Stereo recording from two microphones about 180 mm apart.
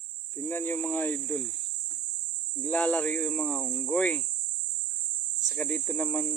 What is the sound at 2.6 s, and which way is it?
Speech, 5° left (ahead or behind).